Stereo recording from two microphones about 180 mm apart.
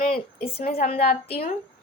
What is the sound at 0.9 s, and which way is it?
Speech, 35° left (ahead or behind).